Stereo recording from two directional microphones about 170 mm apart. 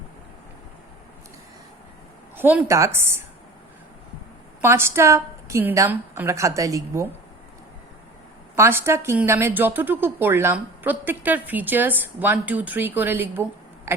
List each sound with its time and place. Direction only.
2.3 s a woman's voice: 10° right (ahead or behind)
4.6 s a woman's voice: 15° right (ahead or behind)
8.5 s a woman's voice: 15° right (ahead or behind)